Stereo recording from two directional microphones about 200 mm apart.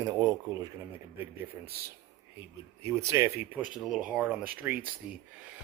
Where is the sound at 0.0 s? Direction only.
15° right (ahead or behind).